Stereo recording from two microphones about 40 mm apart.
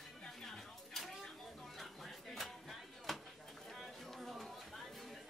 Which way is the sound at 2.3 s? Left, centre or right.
Centre.